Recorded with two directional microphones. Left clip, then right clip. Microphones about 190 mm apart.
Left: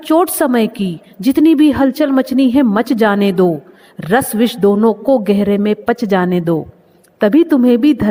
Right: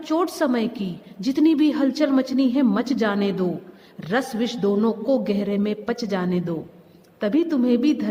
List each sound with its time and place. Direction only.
0.0 s a woman's voice: 40° left (ahead or behind)